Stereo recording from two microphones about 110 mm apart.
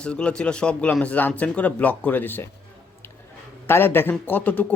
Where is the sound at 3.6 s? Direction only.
20° left (ahead or behind).